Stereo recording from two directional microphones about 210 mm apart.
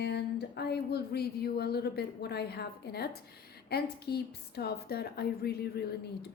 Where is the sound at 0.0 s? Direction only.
50° left (ahead or behind).